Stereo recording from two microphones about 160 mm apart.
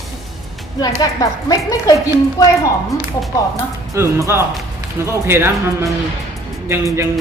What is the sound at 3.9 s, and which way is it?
Speech, 20° right (ahead or behind).